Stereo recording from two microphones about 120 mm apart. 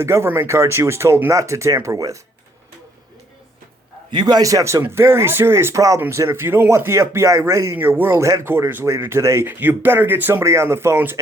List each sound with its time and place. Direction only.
0.0 s speech: 20° right (ahead or behind)
4.1 s speech: 35° right (ahead or behind); by 11.2 s 20° right (ahead or behind)